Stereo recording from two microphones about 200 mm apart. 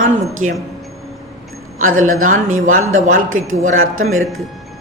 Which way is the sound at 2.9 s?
40° right (ahead or behind).